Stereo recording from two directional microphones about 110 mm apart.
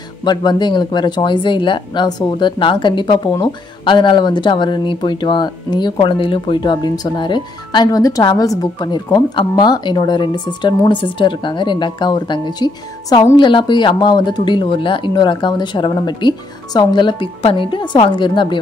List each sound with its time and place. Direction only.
0.2 s speech: 40° left (ahead or behind)